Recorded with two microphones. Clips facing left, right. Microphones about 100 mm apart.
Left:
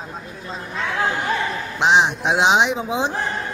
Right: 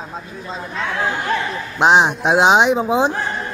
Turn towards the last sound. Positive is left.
turn(degrees=-50)  # may be behind; listen again after turning